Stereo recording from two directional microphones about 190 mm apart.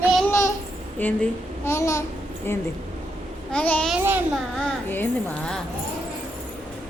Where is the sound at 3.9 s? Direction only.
10° right (ahead or behind).